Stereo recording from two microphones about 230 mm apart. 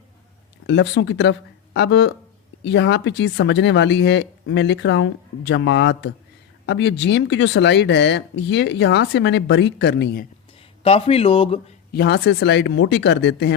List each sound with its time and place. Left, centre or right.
0.7 s speech: left
10.8 s speech: left
11.9 s speech: left